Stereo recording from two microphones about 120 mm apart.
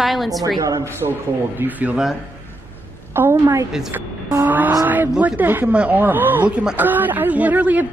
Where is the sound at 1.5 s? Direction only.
15° right (ahead or behind).